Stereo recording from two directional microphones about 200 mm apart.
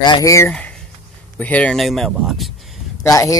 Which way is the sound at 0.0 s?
20° left (ahead or behind).